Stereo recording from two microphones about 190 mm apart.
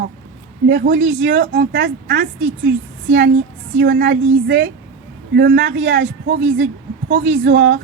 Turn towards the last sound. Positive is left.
turn(degrees=-70)  # may be behind; listen again after turning